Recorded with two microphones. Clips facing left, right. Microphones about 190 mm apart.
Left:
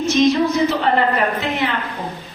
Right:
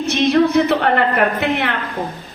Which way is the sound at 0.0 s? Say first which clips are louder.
Right 1 dB; 60° right (ahead or behind).